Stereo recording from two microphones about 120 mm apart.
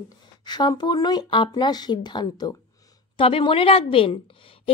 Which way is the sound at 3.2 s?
50° left (ahead or behind).